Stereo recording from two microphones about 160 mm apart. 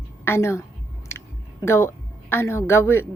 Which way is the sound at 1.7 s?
15° left (ahead or behind).